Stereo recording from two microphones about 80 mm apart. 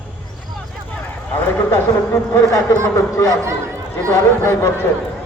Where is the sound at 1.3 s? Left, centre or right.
Left.